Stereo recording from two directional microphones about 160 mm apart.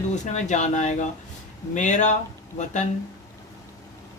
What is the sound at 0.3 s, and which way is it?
A woman's voice, 50° left (ahead or behind).